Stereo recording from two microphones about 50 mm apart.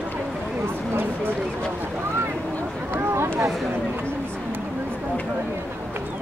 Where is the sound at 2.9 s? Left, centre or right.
Right.